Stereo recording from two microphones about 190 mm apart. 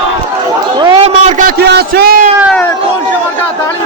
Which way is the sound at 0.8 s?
25° right (ahead or behind).